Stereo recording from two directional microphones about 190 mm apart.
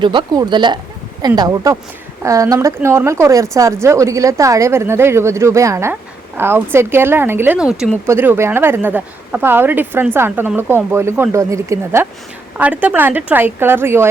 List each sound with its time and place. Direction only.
0.0 s a woman's voice: 25° right (ahead or behind)